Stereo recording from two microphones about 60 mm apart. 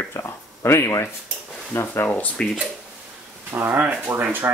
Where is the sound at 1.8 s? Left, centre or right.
Left.